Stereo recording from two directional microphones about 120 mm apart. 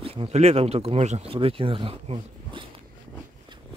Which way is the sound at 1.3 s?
50° right (ahead or behind).